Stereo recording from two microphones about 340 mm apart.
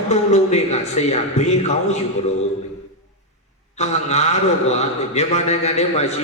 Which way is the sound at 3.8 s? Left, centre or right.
Centre.